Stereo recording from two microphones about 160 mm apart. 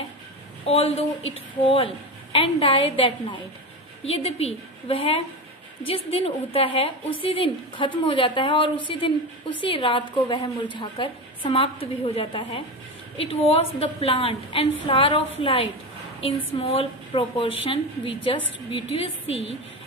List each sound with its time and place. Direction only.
0.7 s a woman's voice: 40° left (ahead or behind)